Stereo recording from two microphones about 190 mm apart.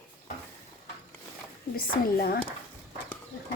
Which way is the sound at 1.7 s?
50° left (ahead or behind).